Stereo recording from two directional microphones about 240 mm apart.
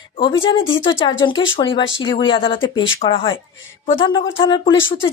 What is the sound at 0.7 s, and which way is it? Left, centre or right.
Speech, left.